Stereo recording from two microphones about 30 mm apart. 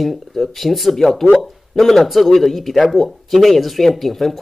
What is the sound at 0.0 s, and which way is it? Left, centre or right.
Speech, centre.